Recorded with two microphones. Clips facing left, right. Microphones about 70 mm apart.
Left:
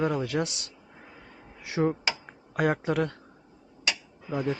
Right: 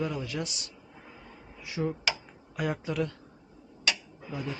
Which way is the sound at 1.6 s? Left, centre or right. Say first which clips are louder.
Left 4 dB; left.